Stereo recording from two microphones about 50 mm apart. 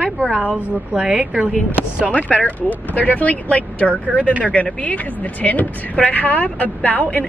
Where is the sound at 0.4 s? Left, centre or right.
Right.